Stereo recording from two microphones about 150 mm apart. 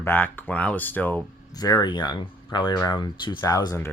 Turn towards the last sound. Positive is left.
turn(degrees=20)  # may be behind; listen again after turning